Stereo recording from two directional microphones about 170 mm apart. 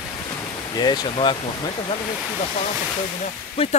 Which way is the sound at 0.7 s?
25° left (ahead or behind).